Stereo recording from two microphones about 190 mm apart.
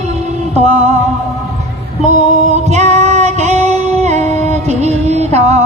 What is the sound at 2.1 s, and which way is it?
Female singing, 35° right (ahead or behind).